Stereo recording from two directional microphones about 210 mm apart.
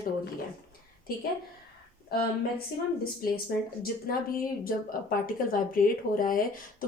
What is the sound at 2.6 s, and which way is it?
Speech, 45° left (ahead or behind).